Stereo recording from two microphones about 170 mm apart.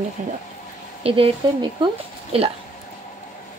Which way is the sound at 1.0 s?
35° right (ahead or behind).